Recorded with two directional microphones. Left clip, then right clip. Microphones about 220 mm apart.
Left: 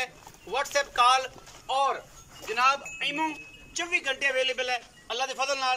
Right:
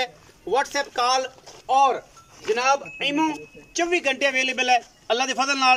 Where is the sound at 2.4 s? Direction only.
35° right (ahead or behind).